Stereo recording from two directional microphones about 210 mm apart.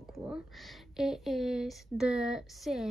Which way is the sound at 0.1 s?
5° right (ahead or behind).